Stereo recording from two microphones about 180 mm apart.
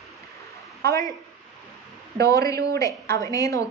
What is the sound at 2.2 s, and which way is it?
A woman's voice, 15° left (ahead or behind).